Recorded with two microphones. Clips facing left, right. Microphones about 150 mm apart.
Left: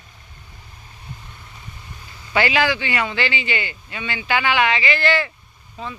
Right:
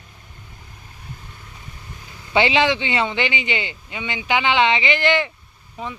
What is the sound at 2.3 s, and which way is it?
Speech, 25° right (ahead or behind).